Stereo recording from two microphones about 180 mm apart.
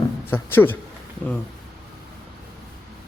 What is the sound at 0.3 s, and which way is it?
Speech, 10° left (ahead or behind).